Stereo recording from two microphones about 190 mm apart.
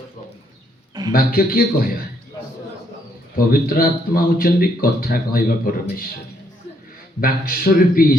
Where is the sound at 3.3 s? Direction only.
50° left (ahead or behind).